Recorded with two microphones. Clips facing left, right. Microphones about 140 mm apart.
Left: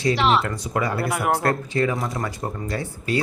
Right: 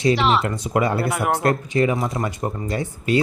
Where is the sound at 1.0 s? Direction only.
Centre (ahead or behind).